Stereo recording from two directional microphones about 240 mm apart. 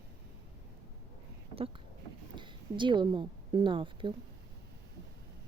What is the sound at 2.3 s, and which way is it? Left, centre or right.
A woman's voice, centre.